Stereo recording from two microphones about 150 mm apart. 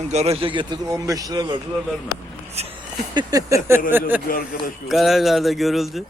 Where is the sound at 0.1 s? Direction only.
45° right (ahead or behind); by 1.5 s 25° right (ahead or behind).